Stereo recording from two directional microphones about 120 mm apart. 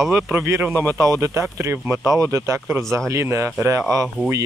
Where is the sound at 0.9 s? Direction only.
25° right (ahead or behind).